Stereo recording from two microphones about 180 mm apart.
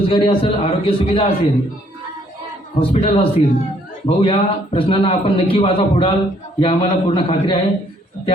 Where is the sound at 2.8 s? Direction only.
35° left (ahead or behind).